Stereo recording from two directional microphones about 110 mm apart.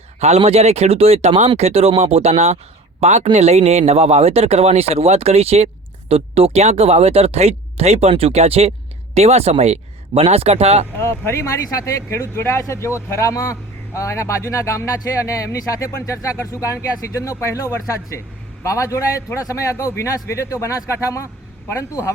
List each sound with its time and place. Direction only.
0.2 s speech: 75° right (ahead or behind)
3.3 s speech: 80° right
11.0 s speech: 20° left (ahead or behind)